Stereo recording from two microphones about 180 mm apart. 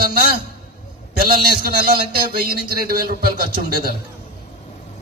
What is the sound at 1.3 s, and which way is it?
A man's voice, 55° right (ahead or behind).